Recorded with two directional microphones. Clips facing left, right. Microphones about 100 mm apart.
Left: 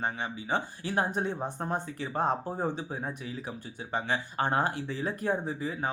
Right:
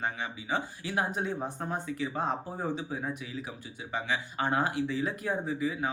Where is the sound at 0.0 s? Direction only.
35° left (ahead or behind).